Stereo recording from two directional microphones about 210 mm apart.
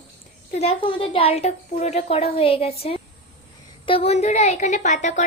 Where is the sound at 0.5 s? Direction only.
30° left (ahead or behind).